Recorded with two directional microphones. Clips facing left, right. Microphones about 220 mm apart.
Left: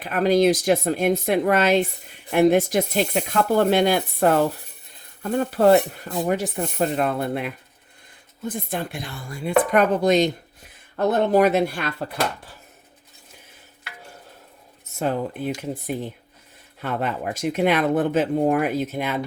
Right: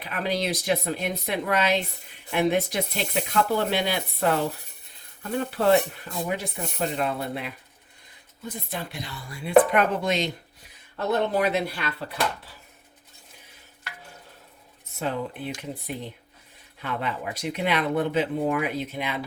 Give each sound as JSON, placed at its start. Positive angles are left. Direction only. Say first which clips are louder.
{"t": 0.0, "sound": "speech", "louder": "left 10 dB", "side_deg": 45}
{"t": 14.9, "sound": "speech", "louder": "left 5 dB", "side_deg": 50}
{"t": 16.8, "sound": "speech", "louder": "left 4 dB", "side_deg": 50}